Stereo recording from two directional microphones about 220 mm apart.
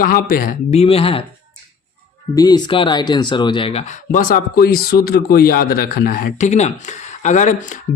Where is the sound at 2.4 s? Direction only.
20° left (ahead or behind).